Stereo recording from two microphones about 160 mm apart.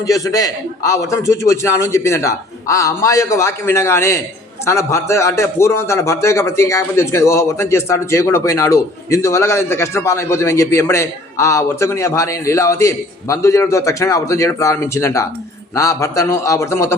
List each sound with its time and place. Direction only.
0.0 s a man's voice: 20° left (ahead or behind)